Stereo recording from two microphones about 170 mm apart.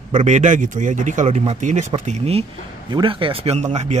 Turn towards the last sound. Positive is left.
turn(degrees=-40)  # may be behind; listen again after turning